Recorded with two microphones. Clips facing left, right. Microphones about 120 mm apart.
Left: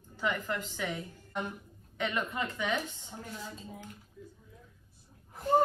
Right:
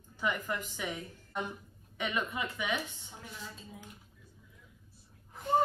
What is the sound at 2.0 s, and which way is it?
Speech, 15° right (ahead or behind).